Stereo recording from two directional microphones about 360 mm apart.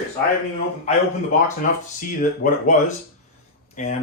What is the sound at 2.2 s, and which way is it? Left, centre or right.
Speech, left.